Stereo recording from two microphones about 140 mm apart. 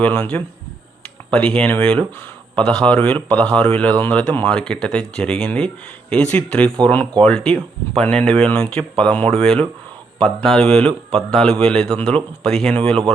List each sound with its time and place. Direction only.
0.0 s a man's voice: 10° left (ahead or behind)